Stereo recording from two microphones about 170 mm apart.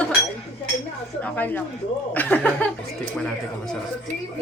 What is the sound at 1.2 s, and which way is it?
A man's voice, 10° left (ahead or behind).